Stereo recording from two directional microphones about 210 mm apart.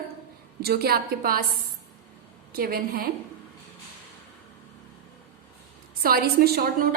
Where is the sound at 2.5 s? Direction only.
45° right (ahead or behind).